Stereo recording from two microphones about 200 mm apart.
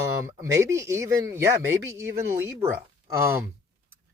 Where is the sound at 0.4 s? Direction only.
15° right (ahead or behind).